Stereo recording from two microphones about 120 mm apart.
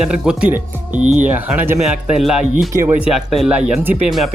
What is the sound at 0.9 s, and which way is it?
Speech, 85° right.